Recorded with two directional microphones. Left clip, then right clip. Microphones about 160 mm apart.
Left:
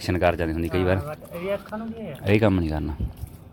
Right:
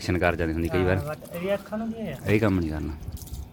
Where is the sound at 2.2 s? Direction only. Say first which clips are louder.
Left 3 dB; 15° left (ahead or behind).